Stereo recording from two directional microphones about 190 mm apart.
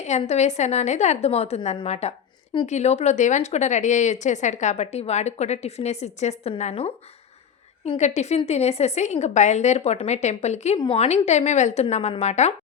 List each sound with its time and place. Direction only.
0.0 s speech: 35° left (ahead or behind)